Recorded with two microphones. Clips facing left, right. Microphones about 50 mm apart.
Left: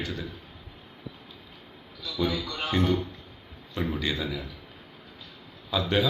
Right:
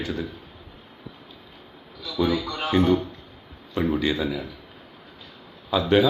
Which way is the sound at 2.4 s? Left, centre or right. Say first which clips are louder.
Right 5 dB; centre.